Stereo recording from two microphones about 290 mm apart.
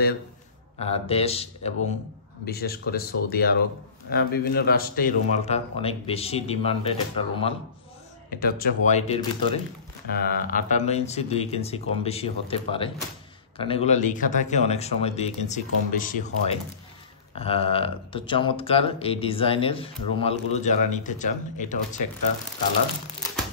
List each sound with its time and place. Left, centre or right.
0.7 s speech: left
2.4 s speech: left
8.4 s speech: left